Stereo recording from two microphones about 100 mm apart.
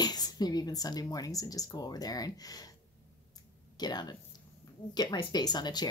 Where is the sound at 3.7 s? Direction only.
45° left (ahead or behind).